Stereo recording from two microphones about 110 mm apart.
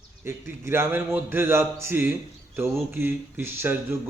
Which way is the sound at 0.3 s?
20° right (ahead or behind).